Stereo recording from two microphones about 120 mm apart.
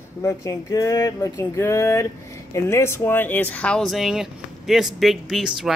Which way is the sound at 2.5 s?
20° left (ahead or behind).